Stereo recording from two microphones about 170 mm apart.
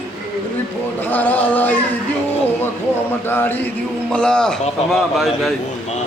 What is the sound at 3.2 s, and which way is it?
Music, 10° left (ahead or behind).